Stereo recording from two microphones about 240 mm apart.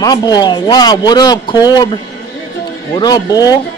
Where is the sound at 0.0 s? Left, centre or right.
Centre.